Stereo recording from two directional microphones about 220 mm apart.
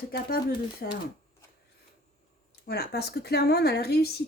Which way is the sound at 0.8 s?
45° left (ahead or behind).